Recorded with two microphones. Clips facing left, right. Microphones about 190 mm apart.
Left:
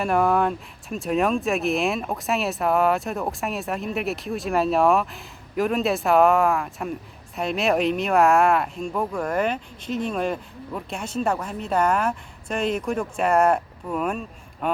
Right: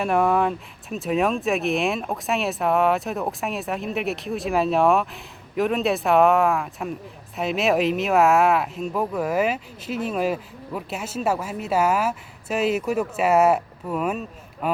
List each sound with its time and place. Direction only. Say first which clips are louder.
0.0 s speech: even; centre (ahead or behind)